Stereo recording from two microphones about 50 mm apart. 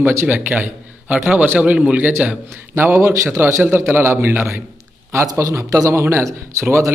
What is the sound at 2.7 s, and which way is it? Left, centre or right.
Speech, right.